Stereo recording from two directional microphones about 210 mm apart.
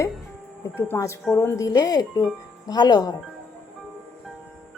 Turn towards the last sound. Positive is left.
turn(degrees=20)  # may be behind; listen again after turning